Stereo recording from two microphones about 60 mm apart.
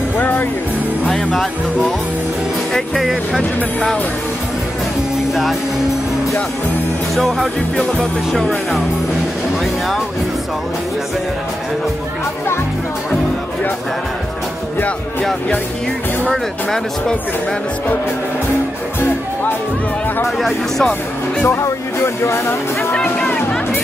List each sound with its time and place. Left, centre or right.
0.2 s music: left
1.0 s speech: centre
2.7 s speech: centre
5.3 s speech: centre
7.2 s speech: centre
7.7 s music: centre
8.3 s speech: centre
20.2 s speech: centre
21.5 s speech: left